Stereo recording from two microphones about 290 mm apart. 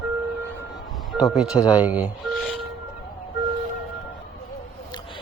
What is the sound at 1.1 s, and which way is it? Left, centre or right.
Speech, centre.